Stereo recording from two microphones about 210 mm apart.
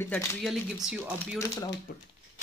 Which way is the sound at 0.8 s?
5° right (ahead or behind).